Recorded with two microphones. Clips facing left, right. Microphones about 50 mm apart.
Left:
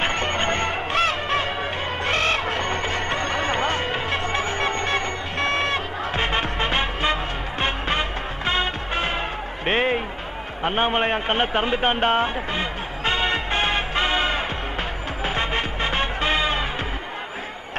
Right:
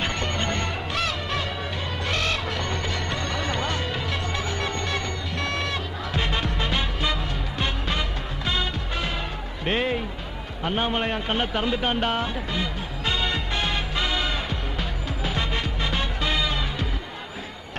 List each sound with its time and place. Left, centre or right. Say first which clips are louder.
0.0 s music: left 4 dB; left
9.6 s a sound: left 3 dB; left
10.6 s a man's voice: left 4 dB; left
13.1 s music: left 4 dB; left